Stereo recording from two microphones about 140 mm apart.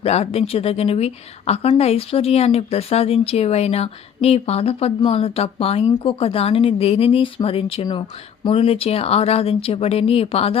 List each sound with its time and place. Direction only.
0.0 s speech: 45° left (ahead or behind)